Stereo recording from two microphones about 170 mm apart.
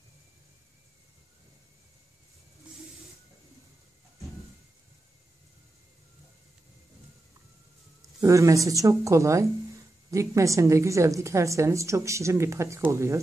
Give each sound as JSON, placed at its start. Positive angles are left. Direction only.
{"t": 8.0, "sound": "a woman's voice", "side_deg": -20}